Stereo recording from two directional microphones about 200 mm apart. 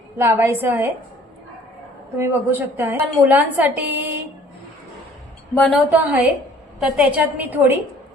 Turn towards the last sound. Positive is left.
turn(degrees=-10)  # may be behind; listen again after turning